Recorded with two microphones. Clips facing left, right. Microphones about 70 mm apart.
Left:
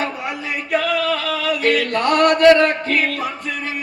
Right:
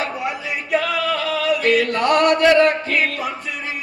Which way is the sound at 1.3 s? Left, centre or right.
Left.